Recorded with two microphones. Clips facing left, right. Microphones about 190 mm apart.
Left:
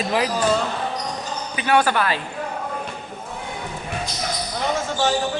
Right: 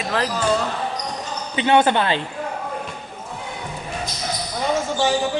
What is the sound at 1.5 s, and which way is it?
Speech, 25° right (ahead or behind).